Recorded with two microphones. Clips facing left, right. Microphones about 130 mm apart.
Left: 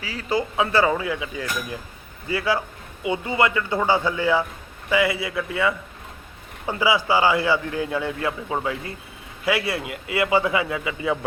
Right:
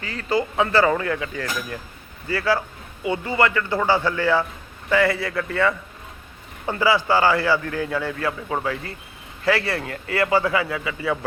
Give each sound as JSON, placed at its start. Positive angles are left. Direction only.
{"t": 0.0, "sound": "a man's voice", "side_deg": 5}